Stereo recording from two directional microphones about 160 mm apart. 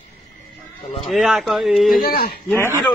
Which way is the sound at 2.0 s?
65° left (ahead or behind).